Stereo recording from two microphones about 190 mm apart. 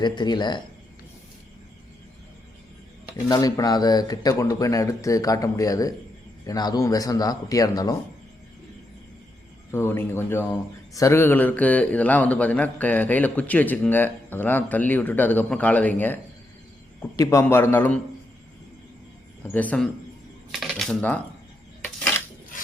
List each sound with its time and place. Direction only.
0.0 s speech: 25° left (ahead or behind)
3.2 s speech: 20° left (ahead or behind)
9.7 s speech: 10° left (ahead or behind)
19.5 s speech: 5° left (ahead or behind)
20.5 s coin: centre (ahead or behind)